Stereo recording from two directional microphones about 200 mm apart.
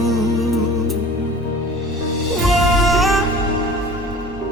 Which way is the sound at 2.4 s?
Centre (ahead or behind).